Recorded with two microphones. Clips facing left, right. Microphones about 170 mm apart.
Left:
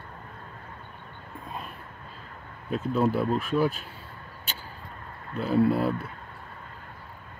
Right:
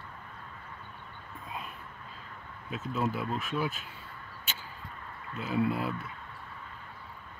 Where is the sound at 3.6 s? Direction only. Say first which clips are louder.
Left 8 dB; 35° left (ahead or behind).